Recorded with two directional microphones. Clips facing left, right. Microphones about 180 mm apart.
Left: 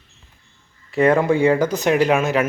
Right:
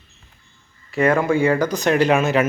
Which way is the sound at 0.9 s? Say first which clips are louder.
Left 2 dB; 25° left (ahead or behind).